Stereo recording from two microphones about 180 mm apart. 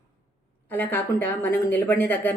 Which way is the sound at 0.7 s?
10° left (ahead or behind).